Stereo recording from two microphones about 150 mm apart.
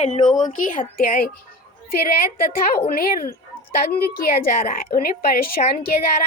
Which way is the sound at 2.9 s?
75° left (ahead or behind).